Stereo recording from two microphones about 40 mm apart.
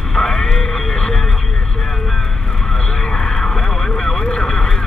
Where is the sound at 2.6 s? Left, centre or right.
Centre.